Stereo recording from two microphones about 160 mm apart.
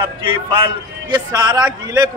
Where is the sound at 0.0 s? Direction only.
30° right (ahead or behind).